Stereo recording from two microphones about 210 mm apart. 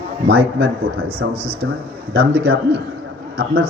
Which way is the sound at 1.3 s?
25° right (ahead or behind).